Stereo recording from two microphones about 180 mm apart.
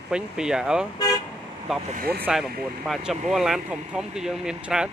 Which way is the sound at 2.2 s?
Centre (ahead or behind).